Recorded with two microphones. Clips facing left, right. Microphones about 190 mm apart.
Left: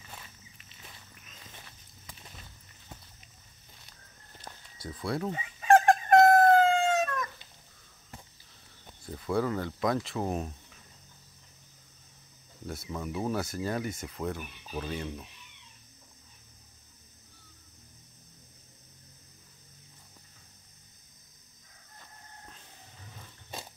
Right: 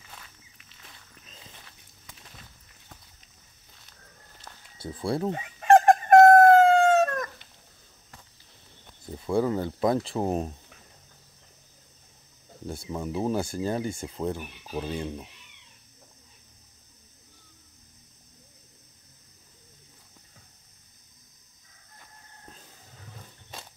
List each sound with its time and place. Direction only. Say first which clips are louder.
1.6 s walk: left 1 dB; 5° left (ahead or behind)
4.7 s speech: right 4 dB; 25° right (ahead or behind)
5.3 s chicken: right 4 dB; 60° right (ahead or behind)
9.0 s speech: right 4 dB; 25° right (ahead or behind)
12.6 s speech: right 4 dB; 30° right (ahead or behind)